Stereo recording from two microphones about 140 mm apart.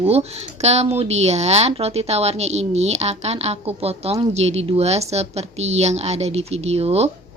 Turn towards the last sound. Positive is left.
turn(degrees=-45)  # may be behind; listen again after turning